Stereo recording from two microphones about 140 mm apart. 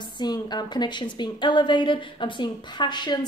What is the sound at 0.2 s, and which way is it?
A woman's voice, 30° left (ahead or behind).